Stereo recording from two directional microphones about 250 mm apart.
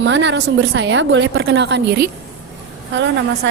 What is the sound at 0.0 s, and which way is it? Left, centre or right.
A woman's voice, right.